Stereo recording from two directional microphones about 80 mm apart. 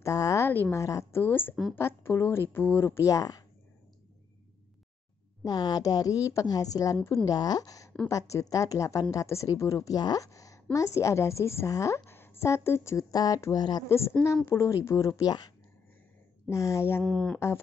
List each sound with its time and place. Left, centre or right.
0.0 s a sound: left
0.5 s speech: left
0.7 s speech: left
1.1 s a woman's voice: left
3.1 s speech: left
5.4 s a woman's voice: left
13.1 s speech: left
13.8 s a woman's voice: left
15.0 s speech: left
16.4 s a woman's voice: left
17.0 s speech: centre